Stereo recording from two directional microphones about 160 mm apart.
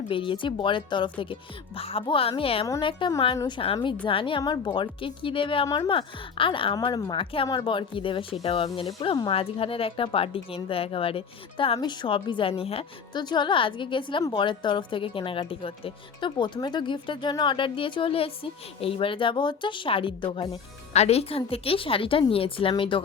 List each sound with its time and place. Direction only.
0.1 s speech: 30° left (ahead or behind)